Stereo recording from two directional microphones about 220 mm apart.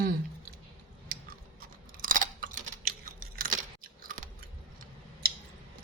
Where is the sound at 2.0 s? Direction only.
35° right (ahead or behind).